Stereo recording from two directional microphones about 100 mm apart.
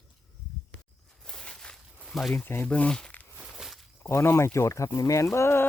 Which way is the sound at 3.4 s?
5° right (ahead or behind).